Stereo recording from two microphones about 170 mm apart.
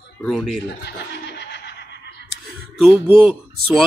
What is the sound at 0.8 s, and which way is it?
Laughter, 75° left (ahead or behind).